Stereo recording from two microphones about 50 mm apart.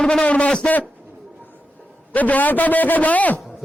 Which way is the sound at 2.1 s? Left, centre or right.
Left.